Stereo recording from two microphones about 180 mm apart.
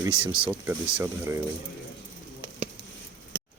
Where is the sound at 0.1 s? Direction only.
30° right (ahead or behind).